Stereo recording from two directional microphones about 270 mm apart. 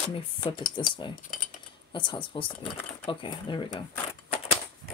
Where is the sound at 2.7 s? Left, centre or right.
Centre.